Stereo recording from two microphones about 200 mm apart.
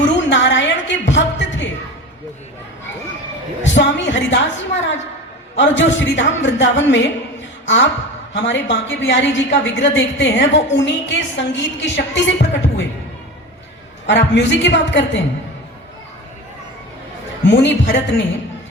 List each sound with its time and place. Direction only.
0.0 s music: 65° left (ahead or behind)
3.6 s a woman's voice: 65° left (ahead or behind)
8.3 s a woman's voice: 65° left (ahead or behind)
14.1 s a woman's voice: 60° left (ahead or behind)
17.5 s a woman's voice: 60° left (ahead or behind)